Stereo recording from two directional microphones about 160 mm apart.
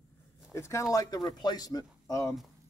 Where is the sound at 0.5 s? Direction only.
15° left (ahead or behind).